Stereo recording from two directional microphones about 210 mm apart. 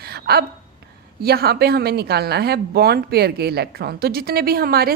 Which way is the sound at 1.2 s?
50° right (ahead or behind).